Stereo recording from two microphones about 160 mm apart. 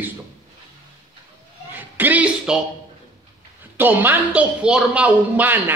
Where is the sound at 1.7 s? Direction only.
10° right (ahead or behind).